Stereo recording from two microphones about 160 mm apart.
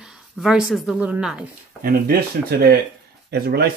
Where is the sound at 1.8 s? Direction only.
65° right (ahead or behind).